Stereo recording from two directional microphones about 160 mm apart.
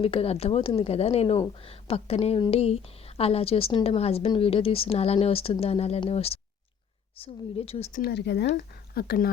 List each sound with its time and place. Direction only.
0.0 s a woman's voice: 35° left (ahead or behind)
7.9 s speech: 85° left
8.5 s speech: 80° left